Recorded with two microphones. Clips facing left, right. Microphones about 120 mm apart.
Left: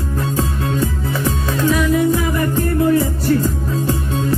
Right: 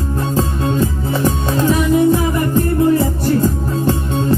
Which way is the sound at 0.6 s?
30° right (ahead or behind).